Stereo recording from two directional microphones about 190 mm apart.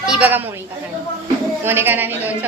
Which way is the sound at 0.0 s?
5° right (ahead or behind).